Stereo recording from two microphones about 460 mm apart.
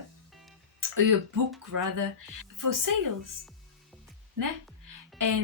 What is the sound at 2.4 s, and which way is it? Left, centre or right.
Speech, right.